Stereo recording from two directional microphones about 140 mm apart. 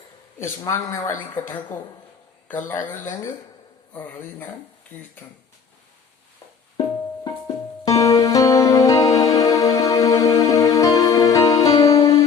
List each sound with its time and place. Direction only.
0.3 s a man's voice: 20° left (ahead or behind)
7.4 s music: 25° left (ahead or behind)